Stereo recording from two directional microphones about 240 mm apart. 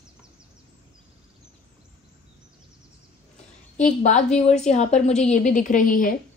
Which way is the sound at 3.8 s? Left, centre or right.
Left.